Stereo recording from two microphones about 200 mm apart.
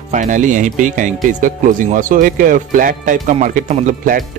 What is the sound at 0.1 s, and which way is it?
Speech, 40° right (ahead or behind).